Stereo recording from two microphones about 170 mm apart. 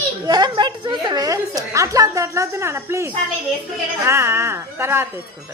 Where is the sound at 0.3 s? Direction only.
25° right (ahead or behind).